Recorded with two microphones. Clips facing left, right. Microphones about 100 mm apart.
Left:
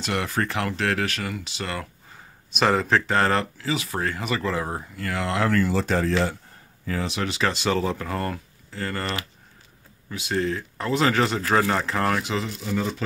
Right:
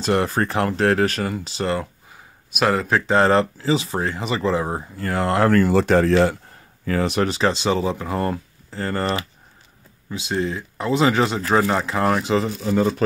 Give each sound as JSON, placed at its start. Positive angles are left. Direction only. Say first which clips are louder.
{"t": 0.0, "sound": "speech", "louder": "right 6 dB", "side_deg": -35}
{"t": 2.5, "sound": "speech", "louder": "right 1 dB", "side_deg": 0}
{"t": 3.1, "sound": "speech", "louder": "right 5 dB", "side_deg": -20}
{"t": 7.4, "sound": "speech", "louder": "right 1 dB", "side_deg": -25}
{"t": 10.0, "sound": "speech", "louder": "right 2 dB", "side_deg": -20}
{"t": 12.2, "sound": "speech", "louder": "right 7 dB", "side_deg": -35}